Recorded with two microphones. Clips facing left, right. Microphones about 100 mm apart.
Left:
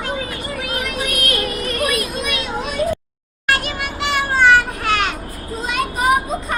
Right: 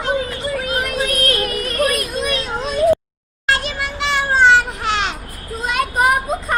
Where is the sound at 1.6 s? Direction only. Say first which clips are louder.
Right 2 dB; 40° right (ahead or behind).